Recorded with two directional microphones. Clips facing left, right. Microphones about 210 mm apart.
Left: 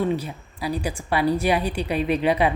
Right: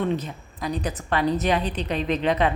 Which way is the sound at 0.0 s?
10° left (ahead or behind).